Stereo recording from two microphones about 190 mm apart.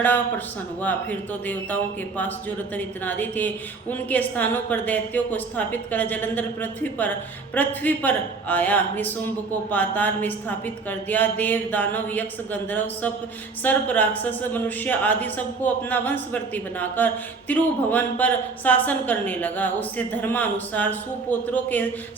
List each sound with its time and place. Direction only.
0.0 s a woman's voice: 10° left (ahead or behind)